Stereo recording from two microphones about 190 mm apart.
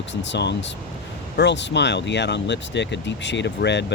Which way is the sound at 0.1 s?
70° left (ahead or behind).